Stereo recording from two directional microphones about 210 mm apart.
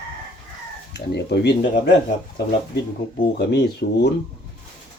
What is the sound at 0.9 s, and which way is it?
Speech, 55° left (ahead or behind).